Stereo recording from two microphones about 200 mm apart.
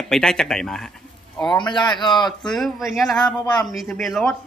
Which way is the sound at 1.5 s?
20° left (ahead or behind).